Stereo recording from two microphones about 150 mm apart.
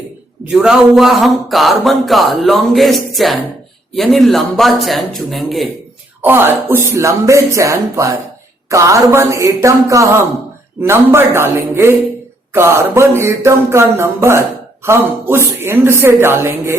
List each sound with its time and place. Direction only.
0.5 s speech: 5° right (ahead or behind)
6.2 s speech: 15° right (ahead or behind)
10.8 s a sound: 15° right (ahead or behind)